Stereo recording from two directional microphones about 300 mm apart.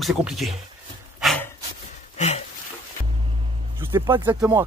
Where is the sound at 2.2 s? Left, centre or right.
Left.